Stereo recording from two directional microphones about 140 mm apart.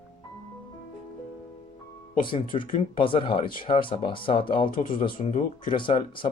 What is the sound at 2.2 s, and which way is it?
Speech, 35° left (ahead or behind).